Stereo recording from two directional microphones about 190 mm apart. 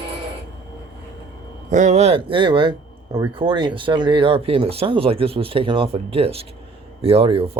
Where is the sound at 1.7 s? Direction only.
40° right (ahead or behind).